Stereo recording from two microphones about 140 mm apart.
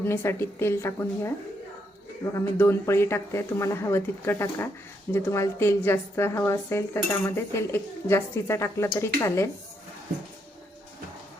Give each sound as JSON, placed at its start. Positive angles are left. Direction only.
{"t": 0.0, "sound": "a woman's voice", "side_deg": 20}
{"t": 2.3, "sound": "a woman's voice", "side_deg": 20}